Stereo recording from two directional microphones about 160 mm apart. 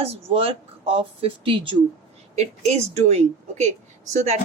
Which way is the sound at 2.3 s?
40° right (ahead or behind).